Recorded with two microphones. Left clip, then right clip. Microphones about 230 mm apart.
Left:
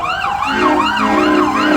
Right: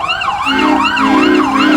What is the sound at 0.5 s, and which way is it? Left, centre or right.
Emergency vehicle, right.